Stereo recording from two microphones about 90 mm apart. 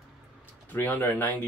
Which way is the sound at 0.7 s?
20° left (ahead or behind).